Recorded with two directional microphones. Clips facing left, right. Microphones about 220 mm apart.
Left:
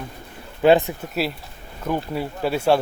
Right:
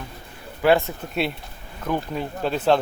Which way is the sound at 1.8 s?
10° left (ahead or behind).